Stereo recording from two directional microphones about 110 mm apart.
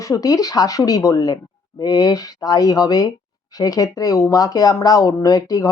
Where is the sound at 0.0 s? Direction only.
30° left (ahead or behind).